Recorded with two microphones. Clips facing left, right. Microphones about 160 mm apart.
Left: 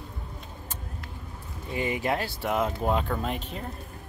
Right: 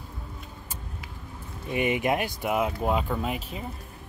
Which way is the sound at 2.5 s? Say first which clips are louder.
Even; 5° right (ahead or behind).